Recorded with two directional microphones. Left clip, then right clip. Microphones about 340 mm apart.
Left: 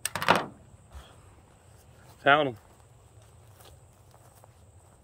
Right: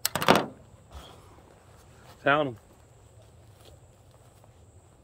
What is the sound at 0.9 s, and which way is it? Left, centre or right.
Vehicle, right.